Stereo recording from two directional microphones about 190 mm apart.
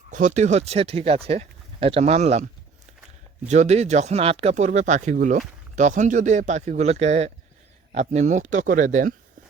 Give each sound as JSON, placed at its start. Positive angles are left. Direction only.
{"t": 0.1, "sound": "speech", "side_deg": -40}
{"t": 3.5, "sound": "speech", "side_deg": -35}